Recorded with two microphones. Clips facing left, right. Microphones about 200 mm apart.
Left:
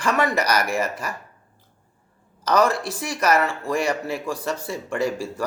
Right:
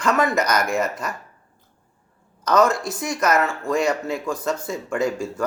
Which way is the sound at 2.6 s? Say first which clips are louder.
Right 3 dB; 30° left (ahead or behind).